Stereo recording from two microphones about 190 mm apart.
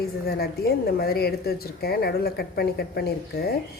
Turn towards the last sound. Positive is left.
turn(degrees=55)  # may be behind; listen again after turning